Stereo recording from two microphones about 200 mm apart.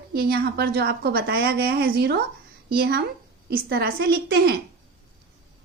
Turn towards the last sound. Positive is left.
turn(degrees=-50)  # may be behind; listen again after turning